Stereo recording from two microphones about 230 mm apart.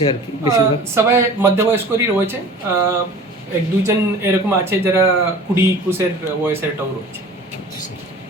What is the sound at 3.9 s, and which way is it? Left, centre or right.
Speech, centre.